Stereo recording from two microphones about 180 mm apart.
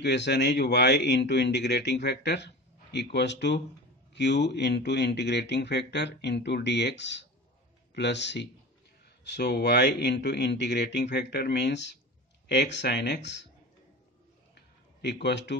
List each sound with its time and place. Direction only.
0.0 s a man's voice: 70° left (ahead or behind)
14.5 s a sound: 70° left (ahead or behind)
15.2 s a man's voice: 75° left (ahead or behind)